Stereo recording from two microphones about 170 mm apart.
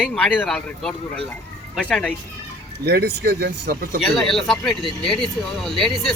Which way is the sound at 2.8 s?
70° right (ahead or behind).